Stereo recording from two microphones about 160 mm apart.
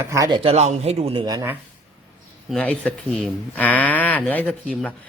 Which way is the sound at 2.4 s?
5° left (ahead or behind).